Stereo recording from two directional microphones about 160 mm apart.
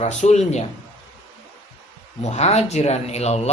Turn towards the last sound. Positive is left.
turn(degrees=40)  # may be behind; listen again after turning